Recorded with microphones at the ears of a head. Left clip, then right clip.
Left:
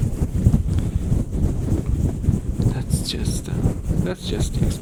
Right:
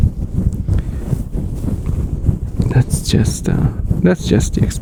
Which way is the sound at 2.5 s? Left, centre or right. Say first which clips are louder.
Right 6 dB; right.